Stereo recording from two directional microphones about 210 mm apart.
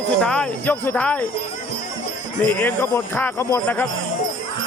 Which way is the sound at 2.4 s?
5° left (ahead or behind).